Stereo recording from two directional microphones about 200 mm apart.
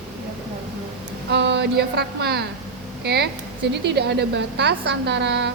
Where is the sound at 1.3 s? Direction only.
60° right (ahead or behind).